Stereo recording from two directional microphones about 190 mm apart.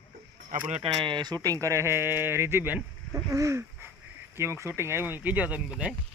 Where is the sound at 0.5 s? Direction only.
45° right (ahead or behind).